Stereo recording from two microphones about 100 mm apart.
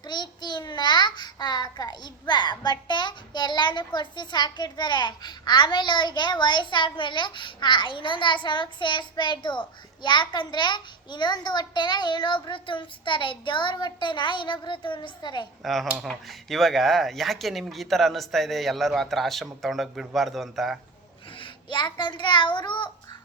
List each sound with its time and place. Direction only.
0.0 s a child's voice: 45° left (ahead or behind)
15.6 s speech: centre (ahead or behind)
21.3 s a child's voice: 55° left (ahead or behind)